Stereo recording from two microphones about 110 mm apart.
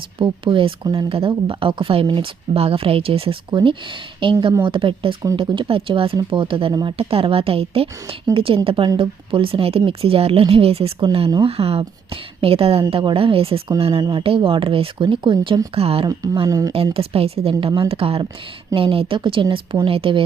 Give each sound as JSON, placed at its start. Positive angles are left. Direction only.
{"t": 0.2, "sound": "a woman's voice", "side_deg": -50}
{"t": 16.5, "sound": "speech", "side_deg": -35}
{"t": 16.7, "sound": "a woman's voice", "side_deg": -60}